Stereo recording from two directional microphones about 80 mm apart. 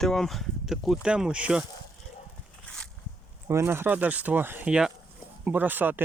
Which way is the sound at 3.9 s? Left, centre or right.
Centre.